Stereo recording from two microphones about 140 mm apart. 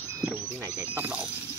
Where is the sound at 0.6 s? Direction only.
20° right (ahead or behind).